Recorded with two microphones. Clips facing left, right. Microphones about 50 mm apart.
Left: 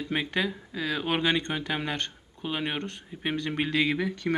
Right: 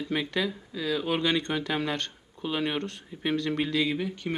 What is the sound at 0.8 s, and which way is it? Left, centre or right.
Speech, left.